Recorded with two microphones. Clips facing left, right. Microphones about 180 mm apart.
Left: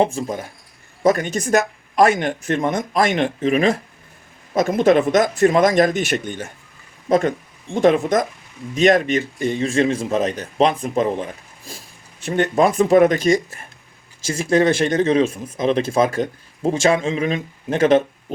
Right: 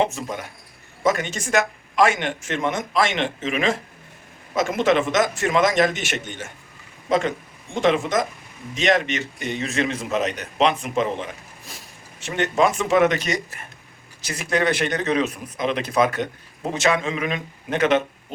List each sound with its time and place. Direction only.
0.0 s speech: 30° left (ahead or behind)
10.7 s speech: 40° left (ahead or behind)
12.2 s speech: 35° left (ahead or behind)